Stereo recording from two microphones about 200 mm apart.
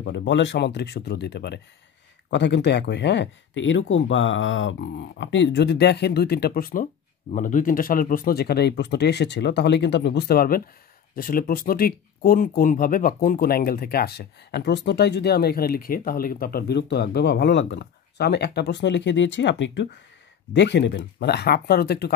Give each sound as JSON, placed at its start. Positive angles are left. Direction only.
{"t": 0.0, "sound": "speech", "side_deg": 60}